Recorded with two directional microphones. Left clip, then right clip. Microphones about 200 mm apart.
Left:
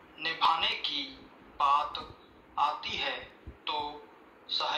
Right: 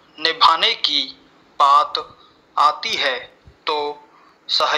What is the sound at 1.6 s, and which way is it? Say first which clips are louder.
Speech: right 13 dB; 60° right (ahead or behind).